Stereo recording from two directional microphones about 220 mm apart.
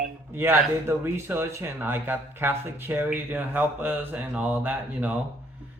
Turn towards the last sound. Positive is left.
turn(degrees=-5)  # may be behind; listen again after turning